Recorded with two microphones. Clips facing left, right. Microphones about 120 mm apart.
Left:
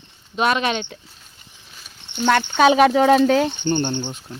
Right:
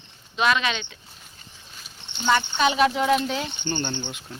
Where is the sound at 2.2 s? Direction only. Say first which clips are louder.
Left 6 dB; 65° left (ahead or behind).